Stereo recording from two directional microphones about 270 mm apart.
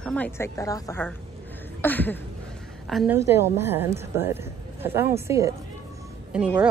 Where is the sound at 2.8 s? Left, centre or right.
Centre.